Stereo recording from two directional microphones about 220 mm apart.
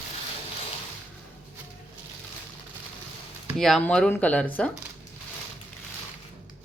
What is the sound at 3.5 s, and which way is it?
Speech, centre (ahead or behind).